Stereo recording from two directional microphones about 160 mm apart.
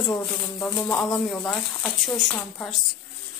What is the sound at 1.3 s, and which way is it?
Speech, 5° left (ahead or behind).